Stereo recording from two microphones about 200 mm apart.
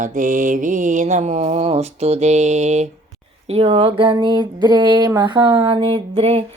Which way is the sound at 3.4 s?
30° right (ahead or behind).